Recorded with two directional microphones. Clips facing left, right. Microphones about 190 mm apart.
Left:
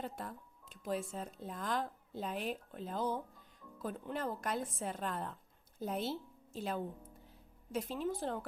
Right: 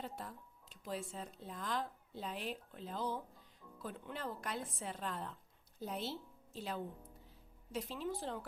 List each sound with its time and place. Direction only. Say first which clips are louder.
0.0 s music: left 3 dB; 50° left (ahead or behind)
1.1 s a woman's voice: left 4 dB; 45° left (ahead or behind)